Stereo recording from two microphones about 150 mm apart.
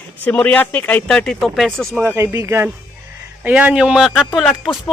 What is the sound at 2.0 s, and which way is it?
A man's voice, 15° right (ahead or behind).